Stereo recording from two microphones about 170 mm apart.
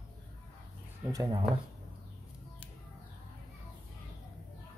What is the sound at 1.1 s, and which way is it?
Speech, 20° right (ahead or behind).